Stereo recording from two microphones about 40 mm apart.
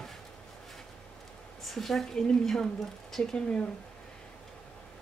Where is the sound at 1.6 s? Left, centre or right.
Centre.